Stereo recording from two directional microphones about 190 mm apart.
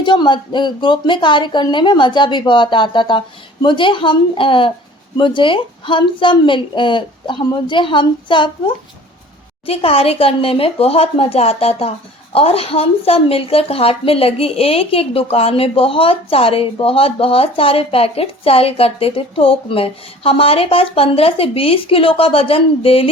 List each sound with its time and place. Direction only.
0.0 s speech: 25° left (ahead or behind)
9.6 s speech: 30° left (ahead or behind)